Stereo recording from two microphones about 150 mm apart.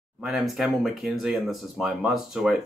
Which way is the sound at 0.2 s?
Centre (ahead or behind).